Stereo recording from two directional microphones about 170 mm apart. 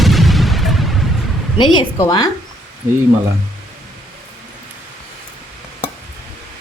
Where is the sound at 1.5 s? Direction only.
25° left (ahead or behind).